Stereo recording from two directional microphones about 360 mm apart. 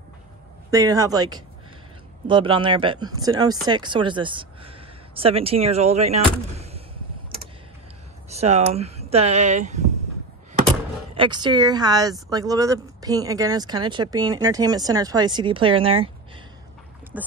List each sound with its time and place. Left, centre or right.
0.7 s speech: centre
8.3 s speech: centre
11.1 s speech: centre
17.1 s speech: centre